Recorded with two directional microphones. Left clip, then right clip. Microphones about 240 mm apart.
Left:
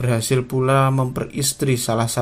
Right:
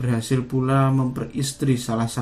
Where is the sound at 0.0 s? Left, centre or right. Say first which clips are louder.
Left 5 dB; left.